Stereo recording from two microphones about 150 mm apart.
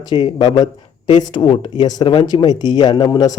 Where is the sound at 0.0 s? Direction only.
30° left (ahead or behind).